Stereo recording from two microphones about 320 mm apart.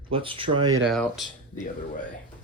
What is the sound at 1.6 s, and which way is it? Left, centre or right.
Speech, left.